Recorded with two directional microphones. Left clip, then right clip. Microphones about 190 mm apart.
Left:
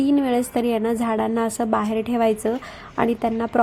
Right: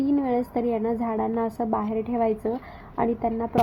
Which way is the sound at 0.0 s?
20° left (ahead or behind).